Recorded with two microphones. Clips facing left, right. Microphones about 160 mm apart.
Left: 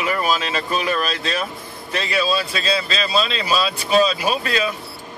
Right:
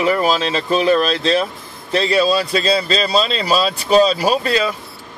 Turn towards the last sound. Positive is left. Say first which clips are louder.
# right 5 dB
turn(degrees=-35)  # may be behind; listen again after turning